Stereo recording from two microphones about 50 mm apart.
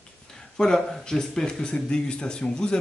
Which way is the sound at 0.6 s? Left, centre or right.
Centre.